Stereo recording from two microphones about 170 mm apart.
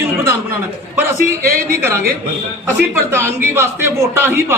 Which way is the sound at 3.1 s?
15° right (ahead or behind).